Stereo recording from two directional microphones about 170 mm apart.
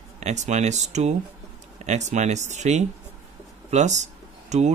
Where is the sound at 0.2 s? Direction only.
45° right (ahead or behind).